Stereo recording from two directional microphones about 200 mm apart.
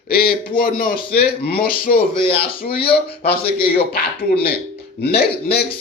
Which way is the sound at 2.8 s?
30° left (ahead or behind).